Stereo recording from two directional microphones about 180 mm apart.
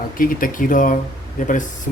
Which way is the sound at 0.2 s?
50° left (ahead or behind).